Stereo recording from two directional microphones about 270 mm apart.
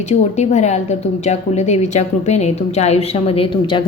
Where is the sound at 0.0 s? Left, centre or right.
Left.